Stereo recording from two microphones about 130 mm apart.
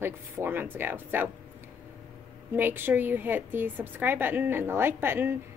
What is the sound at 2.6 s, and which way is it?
A woman's voice, 15° right (ahead or behind).